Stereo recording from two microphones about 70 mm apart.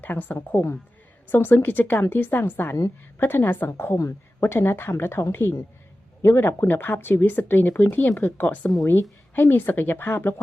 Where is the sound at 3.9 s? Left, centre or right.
Left.